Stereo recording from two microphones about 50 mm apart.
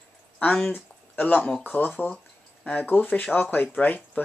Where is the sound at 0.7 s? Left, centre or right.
Left.